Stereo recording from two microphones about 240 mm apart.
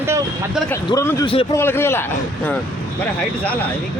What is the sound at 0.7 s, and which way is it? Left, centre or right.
Speech, centre.